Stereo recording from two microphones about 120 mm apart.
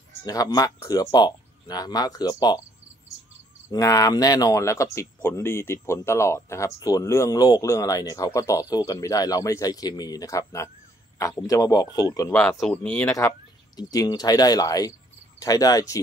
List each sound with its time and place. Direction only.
0.2 s speech: 35° left (ahead or behind)
3.7 s speech: 30° left (ahead or behind)
12.3 s speech: 15° left (ahead or behind)
13.7 s speech: 30° left (ahead or behind)